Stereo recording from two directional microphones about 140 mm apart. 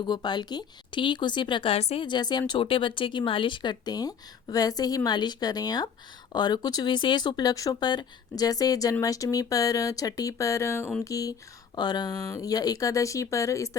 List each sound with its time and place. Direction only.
0.0 s speech: 30° left (ahead or behind); by 2.0 s 45° left (ahead or behind)
2.0 s speech: 30° left (ahead or behind)